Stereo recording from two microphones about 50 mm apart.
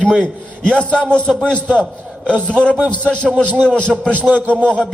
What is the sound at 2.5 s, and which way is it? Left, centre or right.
A man's voice, centre.